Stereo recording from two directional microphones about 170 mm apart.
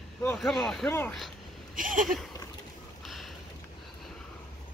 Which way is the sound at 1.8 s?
55° right (ahead or behind).